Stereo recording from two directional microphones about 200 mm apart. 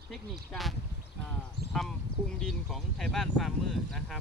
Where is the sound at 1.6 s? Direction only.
25° right (ahead or behind).